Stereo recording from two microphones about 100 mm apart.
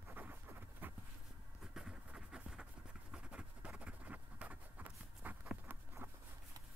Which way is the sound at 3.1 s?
10° right (ahead or behind).